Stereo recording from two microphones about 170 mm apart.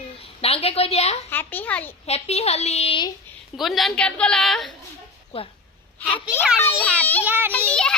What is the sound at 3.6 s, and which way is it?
A woman's voice, centre (ahead or behind).